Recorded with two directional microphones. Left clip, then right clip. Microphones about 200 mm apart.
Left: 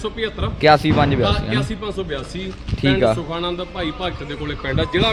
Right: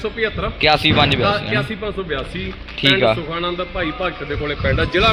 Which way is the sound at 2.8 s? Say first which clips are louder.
Right 3 dB; 30° left (ahead or behind).